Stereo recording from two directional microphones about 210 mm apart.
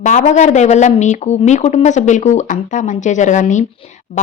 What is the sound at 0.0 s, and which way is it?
Speech, 35° left (ahead or behind).